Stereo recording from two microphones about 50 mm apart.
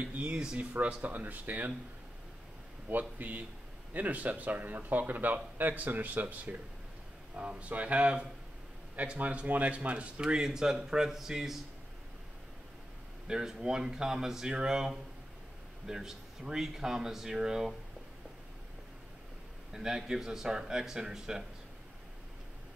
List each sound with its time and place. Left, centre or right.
0.1 s speech: right
2.9 s speech: right; by 11.6 s centre
13.3 s speech: centre
19.7 s speech: centre